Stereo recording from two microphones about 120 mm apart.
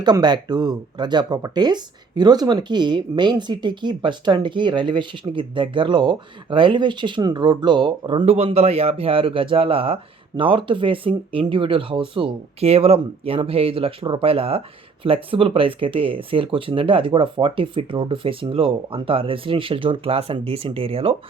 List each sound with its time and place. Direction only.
0.0 s speech: 35° right (ahead or behind)
8.2 s speech: 60° right (ahead or behind)